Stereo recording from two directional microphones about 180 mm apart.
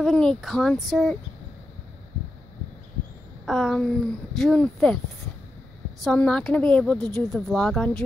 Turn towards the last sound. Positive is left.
turn(degrees=5)  # may be behind; listen again after turning